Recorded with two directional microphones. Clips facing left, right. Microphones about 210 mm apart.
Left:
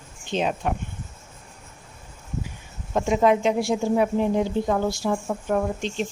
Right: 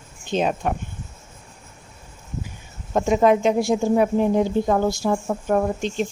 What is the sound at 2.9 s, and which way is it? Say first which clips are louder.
A woman's voice: right 3 dB; 45° right (ahead or behind).